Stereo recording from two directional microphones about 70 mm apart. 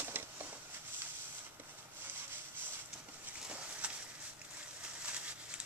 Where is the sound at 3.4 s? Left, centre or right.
Centre.